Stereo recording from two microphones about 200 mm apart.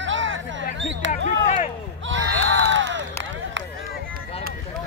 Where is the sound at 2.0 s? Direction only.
75° right (ahead or behind).